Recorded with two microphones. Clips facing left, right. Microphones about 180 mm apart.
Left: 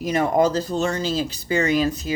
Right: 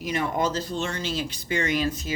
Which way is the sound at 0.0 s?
40° left (ahead or behind).